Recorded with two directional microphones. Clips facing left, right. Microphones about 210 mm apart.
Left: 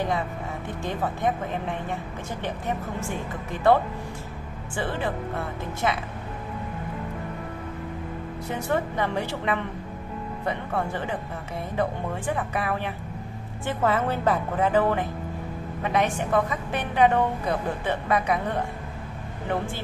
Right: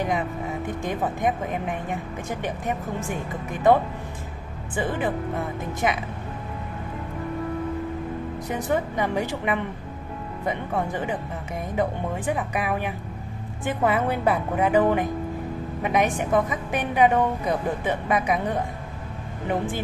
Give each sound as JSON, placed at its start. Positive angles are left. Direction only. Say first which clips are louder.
{"t": 0.8, "sound": "a woman's voice", "louder": "right 1 dB", "side_deg": -15}
{"t": 8.5, "sound": "a woman's voice", "louder": "right 1 dB", "side_deg": -15}